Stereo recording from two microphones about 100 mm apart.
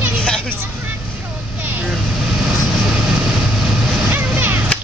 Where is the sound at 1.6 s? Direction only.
20° right (ahead or behind).